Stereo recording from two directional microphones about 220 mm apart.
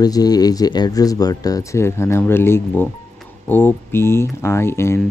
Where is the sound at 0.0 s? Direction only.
15° left (ahead or behind).